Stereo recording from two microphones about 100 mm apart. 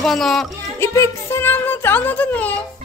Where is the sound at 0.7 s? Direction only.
30° left (ahead or behind).